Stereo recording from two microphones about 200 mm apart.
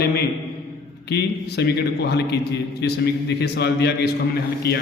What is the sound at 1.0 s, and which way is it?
A man's voice, 55° left (ahead or behind).